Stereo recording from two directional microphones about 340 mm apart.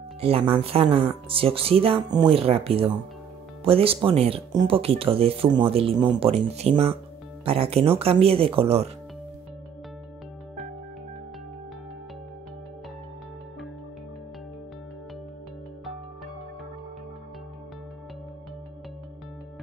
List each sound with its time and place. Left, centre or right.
0.2 s speech: centre